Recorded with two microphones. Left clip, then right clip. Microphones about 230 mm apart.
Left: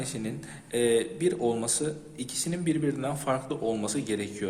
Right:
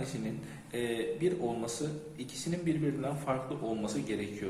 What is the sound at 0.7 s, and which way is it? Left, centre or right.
A man's voice, left.